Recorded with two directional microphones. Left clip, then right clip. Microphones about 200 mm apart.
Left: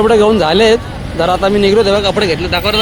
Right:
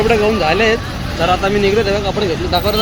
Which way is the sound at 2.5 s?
5° left (ahead or behind).